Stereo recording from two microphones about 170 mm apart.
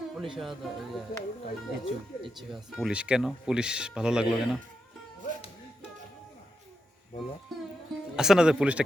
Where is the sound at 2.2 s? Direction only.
Centre (ahead or behind).